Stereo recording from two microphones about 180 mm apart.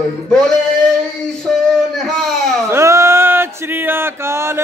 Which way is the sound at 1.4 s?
Centre (ahead or behind).